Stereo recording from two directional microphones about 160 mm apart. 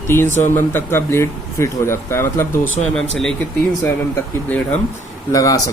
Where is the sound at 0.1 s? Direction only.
15° left (ahead or behind).